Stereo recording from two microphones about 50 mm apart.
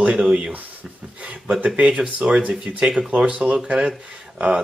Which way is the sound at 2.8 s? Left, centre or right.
Centre.